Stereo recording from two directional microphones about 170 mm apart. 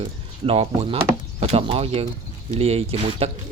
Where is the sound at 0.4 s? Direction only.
40° right (ahead or behind).